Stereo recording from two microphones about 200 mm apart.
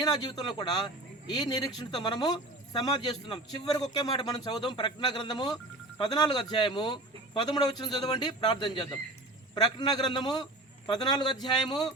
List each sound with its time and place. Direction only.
0.0 s a man's voice: 20° left (ahead or behind)